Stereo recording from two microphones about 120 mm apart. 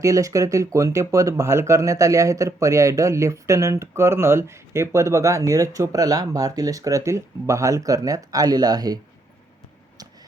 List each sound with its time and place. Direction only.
0.0 s speech: 25° right (ahead or behind)